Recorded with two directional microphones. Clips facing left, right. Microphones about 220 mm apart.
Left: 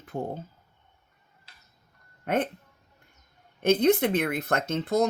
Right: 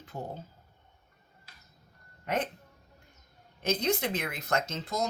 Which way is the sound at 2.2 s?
55° left (ahead or behind).